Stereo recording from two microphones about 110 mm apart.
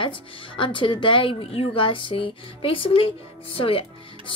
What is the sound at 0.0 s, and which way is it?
Speech, 50° left (ahead or behind).